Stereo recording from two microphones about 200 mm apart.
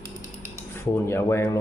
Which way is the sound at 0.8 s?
10° left (ahead or behind).